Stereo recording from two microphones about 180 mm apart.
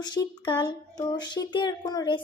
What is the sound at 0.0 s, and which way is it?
Speech, 25° left (ahead or behind).